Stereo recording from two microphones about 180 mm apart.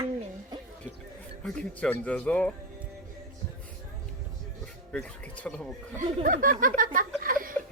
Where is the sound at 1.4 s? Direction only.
5° left (ahead or behind).